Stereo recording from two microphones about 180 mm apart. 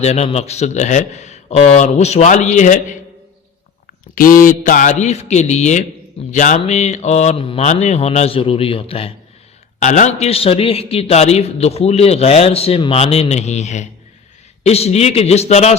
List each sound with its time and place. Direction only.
0.0 s a man's voice: 35° left (ahead or behind)
4.1 s a man's voice: 50° left (ahead or behind)